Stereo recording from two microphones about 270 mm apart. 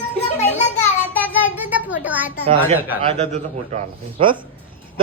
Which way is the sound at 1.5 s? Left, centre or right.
Centre.